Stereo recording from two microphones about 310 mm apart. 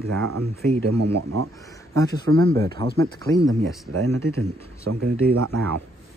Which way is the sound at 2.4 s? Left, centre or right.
Centre.